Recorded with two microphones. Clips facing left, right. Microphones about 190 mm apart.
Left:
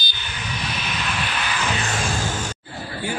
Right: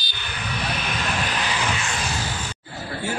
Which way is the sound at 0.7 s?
45° right (ahead or behind).